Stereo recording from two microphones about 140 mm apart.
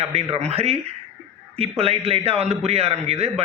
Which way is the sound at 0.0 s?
45° right (ahead or behind).